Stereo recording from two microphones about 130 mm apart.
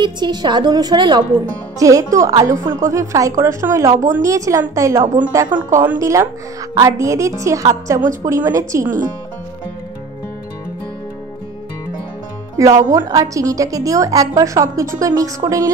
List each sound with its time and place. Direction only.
0.0 s a woman's voice: 35° right (ahead or behind)
12.6 s a woman's voice: 25° right (ahead or behind)